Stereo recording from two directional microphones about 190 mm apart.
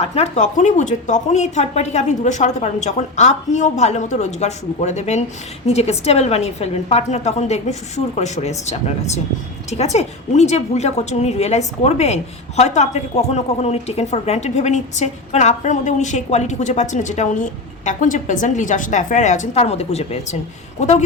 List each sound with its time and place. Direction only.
0.0 s a woman's voice: 35° left (ahead or behind)